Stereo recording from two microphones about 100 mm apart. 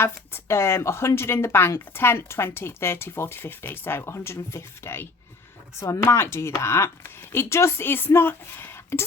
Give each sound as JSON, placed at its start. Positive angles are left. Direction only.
{"t": 0.0, "sound": "speech", "side_deg": 25}